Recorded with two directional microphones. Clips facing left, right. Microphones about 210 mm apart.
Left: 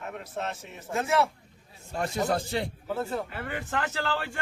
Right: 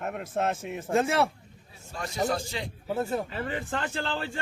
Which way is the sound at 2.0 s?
60° left (ahead or behind).